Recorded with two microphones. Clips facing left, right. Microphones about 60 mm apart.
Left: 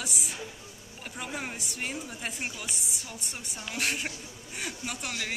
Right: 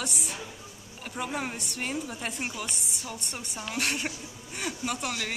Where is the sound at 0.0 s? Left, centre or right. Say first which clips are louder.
Right 2 dB; centre.